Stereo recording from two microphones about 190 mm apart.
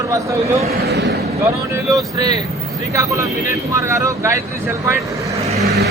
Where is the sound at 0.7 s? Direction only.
55° right (ahead or behind).